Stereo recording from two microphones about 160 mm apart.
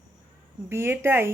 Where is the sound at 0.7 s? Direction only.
15° right (ahead or behind).